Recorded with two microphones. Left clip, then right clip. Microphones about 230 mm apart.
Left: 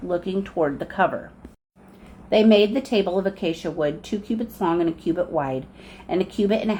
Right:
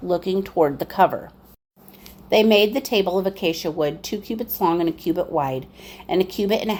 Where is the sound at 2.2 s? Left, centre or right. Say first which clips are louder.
Right 1 dB; right.